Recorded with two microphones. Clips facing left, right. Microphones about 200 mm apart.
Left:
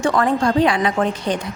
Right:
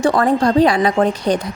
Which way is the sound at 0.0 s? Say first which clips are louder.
Right 3 dB; 35° right (ahead or behind).